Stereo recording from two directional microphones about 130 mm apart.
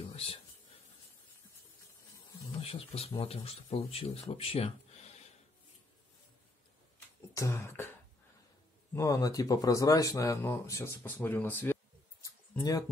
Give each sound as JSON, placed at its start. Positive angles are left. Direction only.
{"t": 0.0, "sound": "a sound", "side_deg": 45}
{"t": 2.6, "sound": "speech", "side_deg": 45}
{"t": 7.3, "sound": "beatboxing", "side_deg": 20}
{"t": 8.9, "sound": "speech", "side_deg": 25}